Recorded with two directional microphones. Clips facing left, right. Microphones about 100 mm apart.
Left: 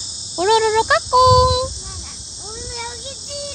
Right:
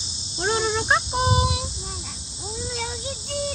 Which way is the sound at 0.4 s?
90° left.